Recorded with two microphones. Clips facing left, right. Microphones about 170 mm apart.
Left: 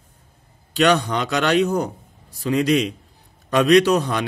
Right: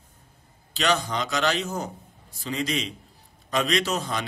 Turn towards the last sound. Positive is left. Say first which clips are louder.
# left 10 dB
turn(degrees=65)  # may be behind; listen again after turning